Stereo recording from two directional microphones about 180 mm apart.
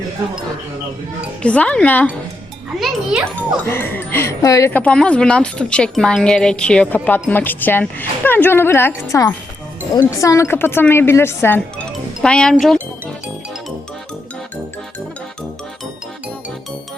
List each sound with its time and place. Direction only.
1.4 s speech: 5° left (ahead or behind)
3.3 s speech: 10° left (ahead or behind)